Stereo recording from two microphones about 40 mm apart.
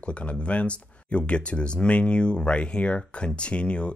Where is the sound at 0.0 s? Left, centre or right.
Left.